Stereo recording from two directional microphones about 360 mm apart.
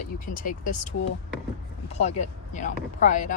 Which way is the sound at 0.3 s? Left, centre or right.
Left.